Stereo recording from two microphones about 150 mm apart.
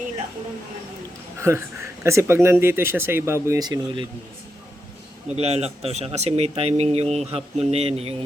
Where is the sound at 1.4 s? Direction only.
20° right (ahead or behind).